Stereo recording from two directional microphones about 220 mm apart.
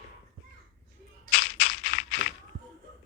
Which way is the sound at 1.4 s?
60° left (ahead or behind).